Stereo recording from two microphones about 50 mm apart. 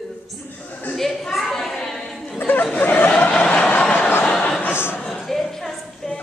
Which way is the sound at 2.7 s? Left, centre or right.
Left.